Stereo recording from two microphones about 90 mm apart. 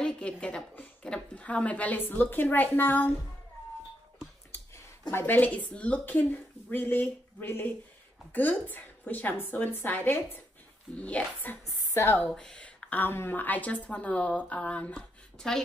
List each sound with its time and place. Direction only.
0.0 s a woman's voice: 10° left (ahead or behind)
5.1 s a woman's voice: 20° left (ahead or behind)
11.6 s a woman's voice: 30° left (ahead or behind)
12.3 s a woman's voice: 5° left (ahead or behind)